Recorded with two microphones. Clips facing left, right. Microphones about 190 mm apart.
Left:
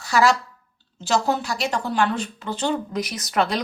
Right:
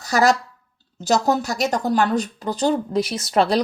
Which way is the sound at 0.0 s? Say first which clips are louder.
Right 1 dB; 40° right (ahead or behind).